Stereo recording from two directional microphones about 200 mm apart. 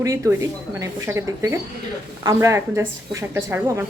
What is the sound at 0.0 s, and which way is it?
A woman's voice, 15° right (ahead or behind).